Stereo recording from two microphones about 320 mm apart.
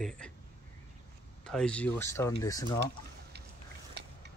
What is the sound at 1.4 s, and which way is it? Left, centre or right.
Speech, centre.